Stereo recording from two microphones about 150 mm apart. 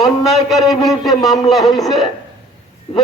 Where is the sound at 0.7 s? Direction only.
25° left (ahead or behind).